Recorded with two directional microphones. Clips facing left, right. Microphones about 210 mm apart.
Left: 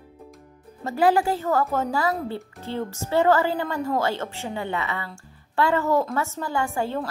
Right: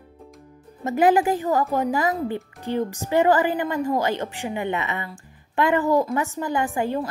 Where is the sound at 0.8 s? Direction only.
20° right (ahead or behind).